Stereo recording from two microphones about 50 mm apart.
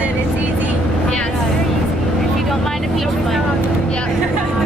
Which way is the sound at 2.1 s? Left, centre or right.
Centre.